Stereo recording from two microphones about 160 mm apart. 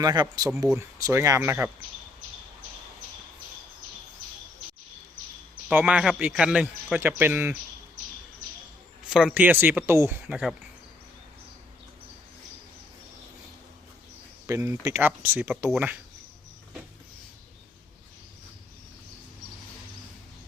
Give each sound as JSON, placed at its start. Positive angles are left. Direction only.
{"t": 0.0, "sound": "speech", "side_deg": -25}
{"t": 5.7, "sound": "speech", "side_deg": -5}
{"t": 9.0, "sound": "speech", "side_deg": -5}
{"t": 14.4, "sound": "speech", "side_deg": -15}